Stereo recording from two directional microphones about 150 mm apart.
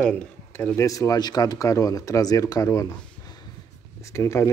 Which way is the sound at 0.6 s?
15° left (ahead or behind).